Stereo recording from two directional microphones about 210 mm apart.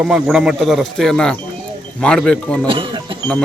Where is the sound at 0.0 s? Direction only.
5° right (ahead or behind).